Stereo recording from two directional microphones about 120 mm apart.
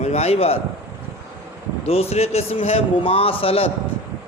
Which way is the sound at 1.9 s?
60° left (ahead or behind).